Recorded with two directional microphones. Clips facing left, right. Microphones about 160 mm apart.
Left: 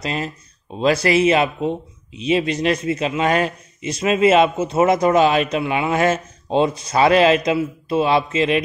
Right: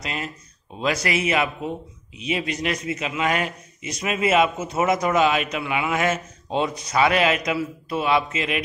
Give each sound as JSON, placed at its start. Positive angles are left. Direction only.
{"t": 0.0, "sound": "a man's voice", "side_deg": 30}